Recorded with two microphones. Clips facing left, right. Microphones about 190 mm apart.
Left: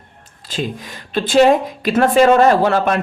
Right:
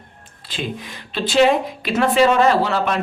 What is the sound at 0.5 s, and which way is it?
A woman's voice, 45° left (ahead or behind).